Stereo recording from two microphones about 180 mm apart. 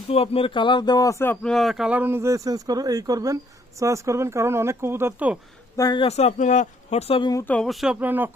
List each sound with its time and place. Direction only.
0.1 s speech: 35° left (ahead or behind); by 1.4 s 15° left (ahead or behind)
1.4 s speech: centre (ahead or behind)
5.7 s speech: 20° left (ahead or behind)
6.1 s speech: 35° left (ahead or behind)
7.4 s speech: 5° left (ahead or behind); by 8.3 s 10° right (ahead or behind)